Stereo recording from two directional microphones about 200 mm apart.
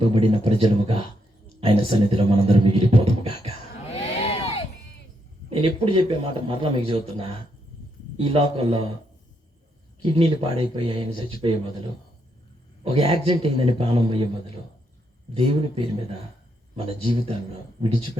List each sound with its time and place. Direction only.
0.0 s a man's voice: 30° right (ahead or behind)
3.8 s a sound: 30° left (ahead or behind)
5.5 s a man's voice: 25° right (ahead or behind)
10.0 s a man's voice: 25° right (ahead or behind)
12.8 s a man's voice: 30° right (ahead or behind)
15.4 s a man's voice: 30° right (ahead or behind)